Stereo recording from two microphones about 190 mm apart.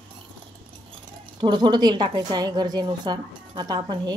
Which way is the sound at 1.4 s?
25° right (ahead or behind).